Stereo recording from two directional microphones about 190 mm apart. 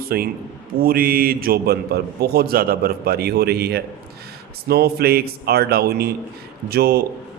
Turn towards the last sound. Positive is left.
turn(degrees=-55)  # may be behind; listen again after turning